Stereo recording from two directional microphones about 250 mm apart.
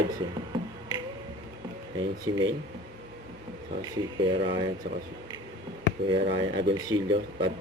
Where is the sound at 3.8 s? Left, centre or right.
Centre.